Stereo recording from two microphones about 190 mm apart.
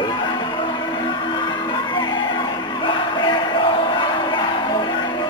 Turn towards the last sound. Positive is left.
turn(degrees=25)  # may be behind; listen again after turning